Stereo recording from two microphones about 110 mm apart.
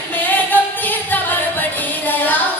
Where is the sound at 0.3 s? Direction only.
15° left (ahead or behind).